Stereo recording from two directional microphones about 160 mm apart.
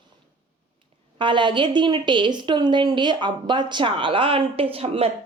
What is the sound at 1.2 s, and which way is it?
Speech, 30° right (ahead or behind).